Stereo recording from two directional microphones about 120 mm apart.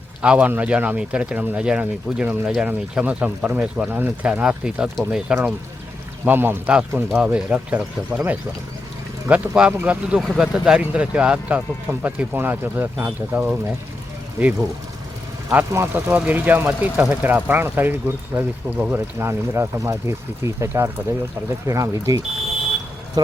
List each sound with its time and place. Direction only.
0.2 s speech: 10° right (ahead or behind)
10.2 s speech: centre (ahead or behind); by 13.6 s 15° right (ahead or behind)
15.4 s speech: 20° right (ahead or behind); by 23.3 s 35° right (ahead or behind)